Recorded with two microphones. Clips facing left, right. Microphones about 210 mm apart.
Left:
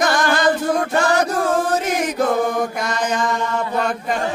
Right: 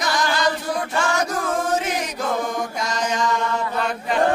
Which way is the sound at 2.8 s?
55° left (ahead or behind).